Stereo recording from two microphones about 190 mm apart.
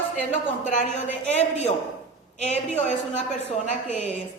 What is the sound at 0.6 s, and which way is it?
Speech, 40° left (ahead or behind).